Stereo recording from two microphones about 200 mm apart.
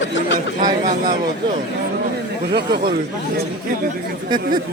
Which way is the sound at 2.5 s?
55° right (ahead or behind).